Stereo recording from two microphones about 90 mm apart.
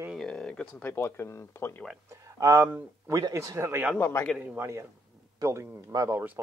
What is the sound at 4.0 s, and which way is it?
Speech, 30° left (ahead or behind).